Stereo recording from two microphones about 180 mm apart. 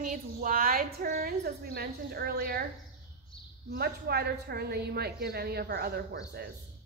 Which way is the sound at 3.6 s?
60° right (ahead or behind).